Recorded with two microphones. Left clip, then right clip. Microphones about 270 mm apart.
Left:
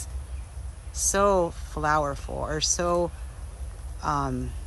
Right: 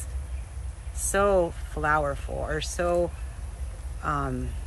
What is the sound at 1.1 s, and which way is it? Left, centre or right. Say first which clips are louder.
A woman's voice: even; centre.